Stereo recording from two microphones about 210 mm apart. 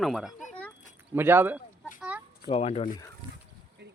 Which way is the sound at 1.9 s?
5° right (ahead or behind).